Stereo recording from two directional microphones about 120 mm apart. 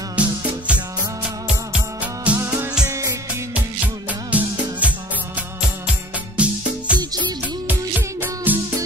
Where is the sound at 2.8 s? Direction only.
25° right (ahead or behind).